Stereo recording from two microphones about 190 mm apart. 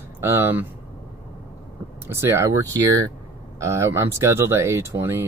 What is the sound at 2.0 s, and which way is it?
Speech, 15° right (ahead or behind).